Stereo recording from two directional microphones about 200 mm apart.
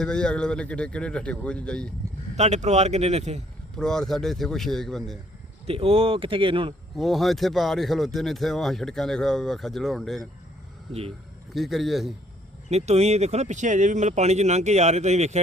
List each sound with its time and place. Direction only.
0.0 s speech: 5° left (ahead or behind)
2.3 s speech: 35° right (ahead or behind)
3.8 s speech: 5° left (ahead or behind)
5.6 s a man's voice: 30° right (ahead or behind)
6.9 s speech: centre (ahead or behind)
11.5 s speech: centre (ahead or behind)
12.6 s speech: 35° right (ahead or behind)